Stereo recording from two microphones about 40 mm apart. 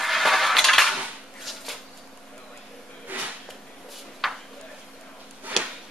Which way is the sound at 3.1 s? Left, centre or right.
Right.